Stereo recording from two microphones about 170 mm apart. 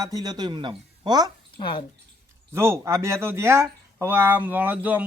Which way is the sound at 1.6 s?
30° left (ahead or behind).